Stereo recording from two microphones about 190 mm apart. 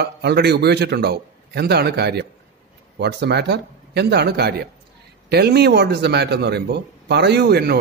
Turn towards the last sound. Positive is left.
turn(degrees=-55)  # may be behind; listen again after turning